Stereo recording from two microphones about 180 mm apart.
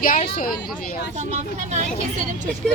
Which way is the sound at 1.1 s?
40° right (ahead or behind).